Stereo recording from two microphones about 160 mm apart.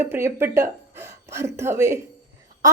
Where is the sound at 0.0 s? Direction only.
15° right (ahead or behind).